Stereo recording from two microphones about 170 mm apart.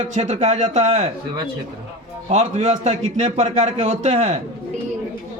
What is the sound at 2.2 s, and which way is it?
A man's voice, 40° right (ahead or behind).